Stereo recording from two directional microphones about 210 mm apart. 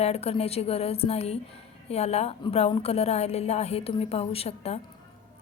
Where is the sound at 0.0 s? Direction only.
30° left (ahead or behind).